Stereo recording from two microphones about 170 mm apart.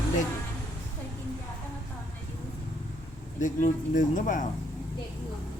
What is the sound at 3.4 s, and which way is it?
Speech, 50° left (ahead or behind).